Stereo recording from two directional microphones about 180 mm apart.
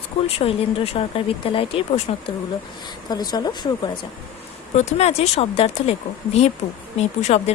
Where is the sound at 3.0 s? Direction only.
25° left (ahead or behind).